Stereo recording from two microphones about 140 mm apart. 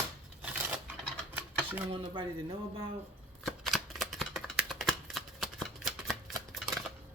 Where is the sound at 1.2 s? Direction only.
15° right (ahead or behind).